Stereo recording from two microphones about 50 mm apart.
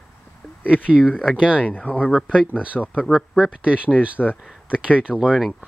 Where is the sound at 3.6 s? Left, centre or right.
Right.